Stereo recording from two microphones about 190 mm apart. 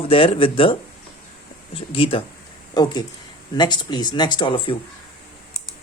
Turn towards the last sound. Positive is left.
turn(degrees=25)  # may be behind; listen again after turning